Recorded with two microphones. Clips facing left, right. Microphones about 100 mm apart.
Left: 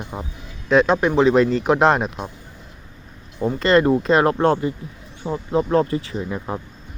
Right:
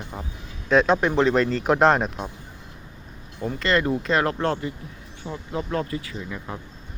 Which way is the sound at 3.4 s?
25° left (ahead or behind).